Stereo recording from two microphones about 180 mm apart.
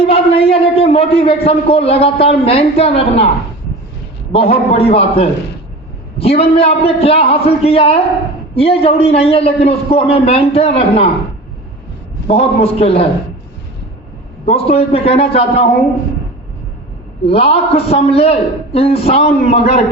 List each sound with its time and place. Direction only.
0.0 s a man's voice: 35° left (ahead or behind)
4.3 s a man's voice: 35° left (ahead or behind)
12.3 s a man's voice: 35° left (ahead or behind)
14.4 s a man's voice: 35° left (ahead or behind)
17.2 s a man's voice: 30° left (ahead or behind)